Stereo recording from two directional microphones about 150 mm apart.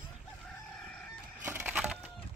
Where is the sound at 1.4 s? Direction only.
10° right (ahead or behind).